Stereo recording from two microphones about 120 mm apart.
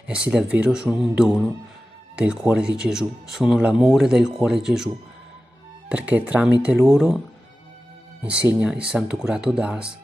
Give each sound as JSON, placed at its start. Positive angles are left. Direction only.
{"t": 0.0, "sound": "speech", "side_deg": -10}
{"t": 8.3, "sound": "speech", "side_deg": -10}